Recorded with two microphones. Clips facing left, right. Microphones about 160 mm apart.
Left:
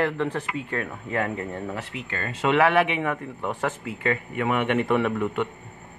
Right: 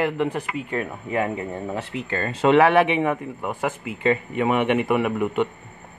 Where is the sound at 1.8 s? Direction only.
35° right (ahead or behind).